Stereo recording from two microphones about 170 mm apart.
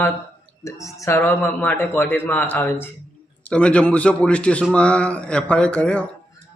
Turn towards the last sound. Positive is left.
turn(degrees=5)  # may be behind; listen again after turning